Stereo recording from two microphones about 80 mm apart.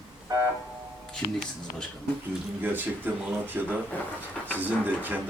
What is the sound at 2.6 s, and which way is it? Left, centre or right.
Speech, right.